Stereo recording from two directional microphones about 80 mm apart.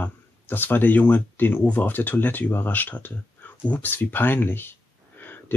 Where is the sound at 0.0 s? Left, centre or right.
Left.